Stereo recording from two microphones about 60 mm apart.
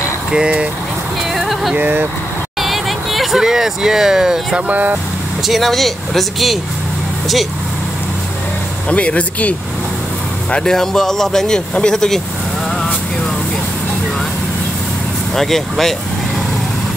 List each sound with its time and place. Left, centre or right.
0.3 s speech: centre
1.3 s a sound: centre
1.8 s speech: right
2.6 s speech: centre
4.6 s speech: right
5.5 s speech: centre
8.8 s speech: left
10.5 s speech: centre
15.3 s speech: centre